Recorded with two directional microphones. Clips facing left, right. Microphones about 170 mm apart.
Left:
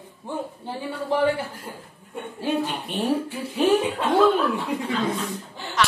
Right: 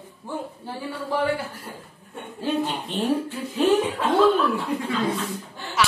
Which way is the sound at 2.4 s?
10° left (ahead or behind).